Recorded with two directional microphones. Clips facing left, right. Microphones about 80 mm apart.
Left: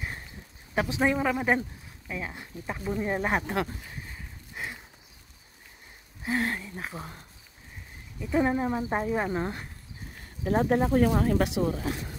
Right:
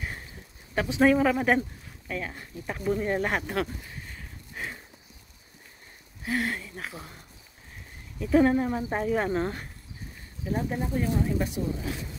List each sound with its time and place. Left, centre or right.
1.0 s speech: centre; by 3.7 s left
4.1 s a sound: centre
6.2 s speech: left
8.2 s speech: centre
8.5 s speech: centre
10.4 s speech: left